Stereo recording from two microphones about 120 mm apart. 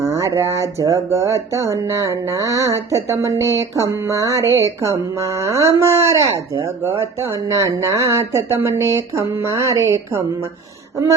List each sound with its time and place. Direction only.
0.0 s speech: 25° right (ahead or behind)